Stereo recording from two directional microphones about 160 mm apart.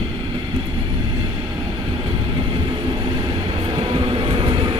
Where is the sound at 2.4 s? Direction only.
30° right (ahead or behind).